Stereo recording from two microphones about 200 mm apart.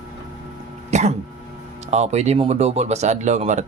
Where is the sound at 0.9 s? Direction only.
35° right (ahead or behind).